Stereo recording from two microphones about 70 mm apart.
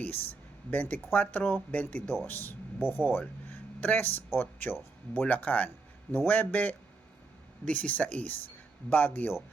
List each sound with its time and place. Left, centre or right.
0.0 s speech: left